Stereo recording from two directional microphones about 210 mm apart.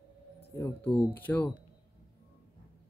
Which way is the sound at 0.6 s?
10° left (ahead or behind).